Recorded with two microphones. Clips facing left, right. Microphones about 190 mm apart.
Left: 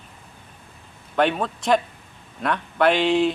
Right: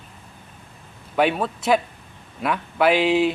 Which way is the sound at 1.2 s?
5° right (ahead or behind).